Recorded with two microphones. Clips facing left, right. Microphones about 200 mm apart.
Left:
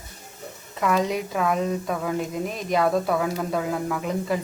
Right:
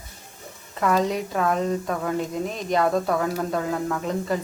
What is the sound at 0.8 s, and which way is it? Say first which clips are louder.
A woman's voice: right 1 dB; centre (ahead or behind).